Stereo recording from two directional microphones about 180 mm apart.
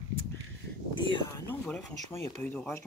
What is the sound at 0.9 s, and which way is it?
Speech, 25° left (ahead or behind).